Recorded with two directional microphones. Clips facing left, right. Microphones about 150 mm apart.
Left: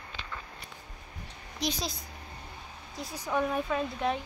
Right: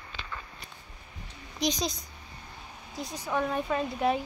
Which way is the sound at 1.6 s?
5° left (ahead or behind).